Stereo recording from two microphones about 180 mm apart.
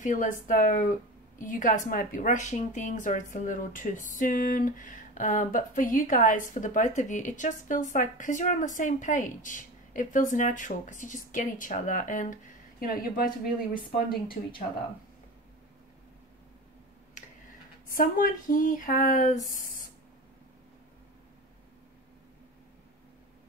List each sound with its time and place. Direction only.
0.0 s speech: 45° left (ahead or behind)
13.7 s speech: 25° left (ahead or behind)
17.9 s speech: 50° left (ahead or behind)